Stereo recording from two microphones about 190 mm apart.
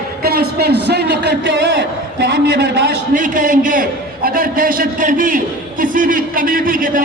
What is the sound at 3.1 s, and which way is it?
A man's voice, 45° right (ahead or behind).